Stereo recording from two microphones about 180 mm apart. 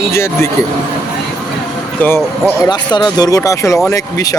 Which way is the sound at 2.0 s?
15° left (ahead or behind).